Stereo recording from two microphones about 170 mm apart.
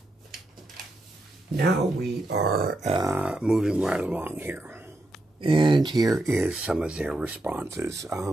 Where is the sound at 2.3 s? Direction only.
65° right (ahead or behind).